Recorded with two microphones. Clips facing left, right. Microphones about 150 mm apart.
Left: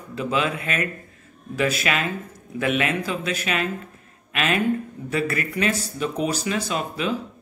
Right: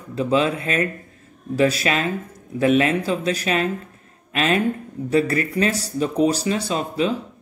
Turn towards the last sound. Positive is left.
turn(degrees=-30)  # may be behind; listen again after turning